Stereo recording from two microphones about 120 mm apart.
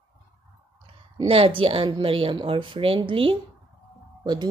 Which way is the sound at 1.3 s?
45° right (ahead or behind).